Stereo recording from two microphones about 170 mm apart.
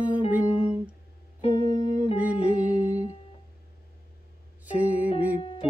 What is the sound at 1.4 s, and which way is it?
Music, 25° left (ahead or behind).